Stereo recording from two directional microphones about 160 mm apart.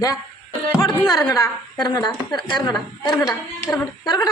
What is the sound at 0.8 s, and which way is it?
A woman's voice, 25° left (ahead or behind).